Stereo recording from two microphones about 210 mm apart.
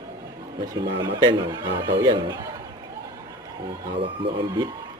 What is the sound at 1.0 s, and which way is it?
Speech, 20° right (ahead or behind).